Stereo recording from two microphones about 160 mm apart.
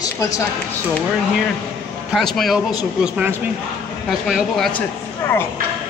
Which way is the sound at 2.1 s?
Centre (ahead or behind).